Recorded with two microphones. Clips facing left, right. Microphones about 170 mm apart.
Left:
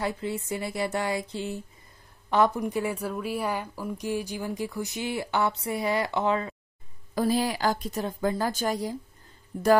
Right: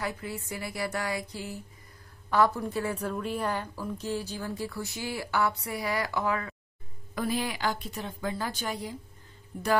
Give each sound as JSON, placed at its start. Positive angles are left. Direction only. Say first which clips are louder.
{"t": 0.0, "sound": "a woman's voice", "louder": "left 5 dB", "side_deg": 25}
{"t": 7.2, "sound": "a woman's voice", "louder": "left 5 dB", "side_deg": 35}